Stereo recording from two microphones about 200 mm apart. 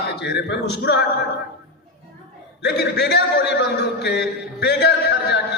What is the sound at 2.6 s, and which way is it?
A man's voice, 55° left (ahead or behind).